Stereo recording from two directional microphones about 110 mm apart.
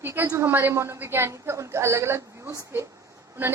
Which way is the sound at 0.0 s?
20° right (ahead or behind).